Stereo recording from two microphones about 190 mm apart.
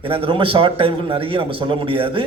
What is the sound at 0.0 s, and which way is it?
A man's voice, 30° right (ahead or behind).